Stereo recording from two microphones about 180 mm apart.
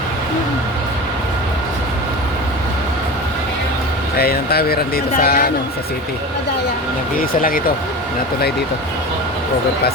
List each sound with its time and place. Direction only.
4.2 s speech: 60° left (ahead or behind)
7.2 s speech: 50° left (ahead or behind)